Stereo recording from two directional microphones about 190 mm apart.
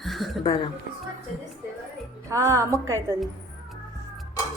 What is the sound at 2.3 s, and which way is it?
Speech, 15° right (ahead or behind).